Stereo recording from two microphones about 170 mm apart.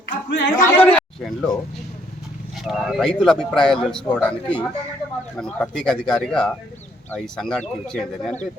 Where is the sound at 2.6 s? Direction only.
Centre (ahead or behind).